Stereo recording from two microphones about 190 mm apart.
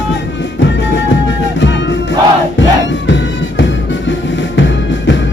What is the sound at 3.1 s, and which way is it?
Music, 75° left (ahead or behind).